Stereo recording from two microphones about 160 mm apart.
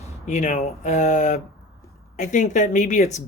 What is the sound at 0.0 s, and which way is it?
Speech, 45° left (ahead or behind).